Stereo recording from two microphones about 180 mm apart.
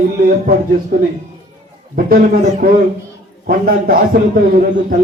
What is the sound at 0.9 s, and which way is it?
Speech, 55° right (ahead or behind).